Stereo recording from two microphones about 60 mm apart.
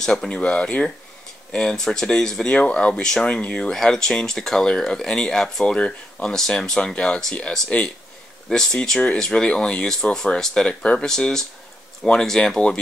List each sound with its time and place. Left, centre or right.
0.0 s speech: centre